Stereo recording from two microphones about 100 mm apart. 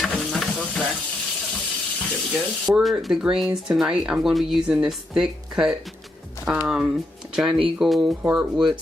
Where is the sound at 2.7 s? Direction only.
15° right (ahead or behind).